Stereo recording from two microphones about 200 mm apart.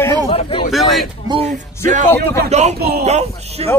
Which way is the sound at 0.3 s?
25° left (ahead or behind).